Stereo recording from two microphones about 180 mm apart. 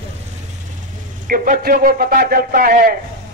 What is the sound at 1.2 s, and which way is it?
A man's voice, 50° right (ahead or behind).